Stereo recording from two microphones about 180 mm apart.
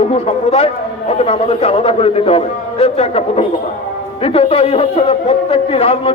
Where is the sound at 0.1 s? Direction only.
35° left (ahead or behind).